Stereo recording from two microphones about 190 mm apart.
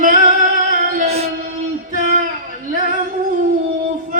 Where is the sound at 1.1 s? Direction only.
35° right (ahead or behind).